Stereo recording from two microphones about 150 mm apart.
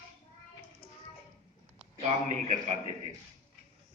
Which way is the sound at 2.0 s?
50° right (ahead or behind).